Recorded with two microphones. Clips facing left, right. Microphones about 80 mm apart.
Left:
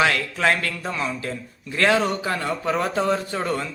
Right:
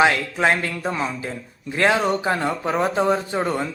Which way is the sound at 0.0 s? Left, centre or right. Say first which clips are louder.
Right 3 dB; right.